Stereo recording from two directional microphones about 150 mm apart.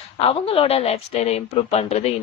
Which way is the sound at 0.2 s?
40° left (ahead or behind).